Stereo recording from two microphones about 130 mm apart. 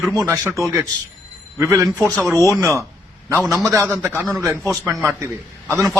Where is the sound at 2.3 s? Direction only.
25° right (ahead or behind).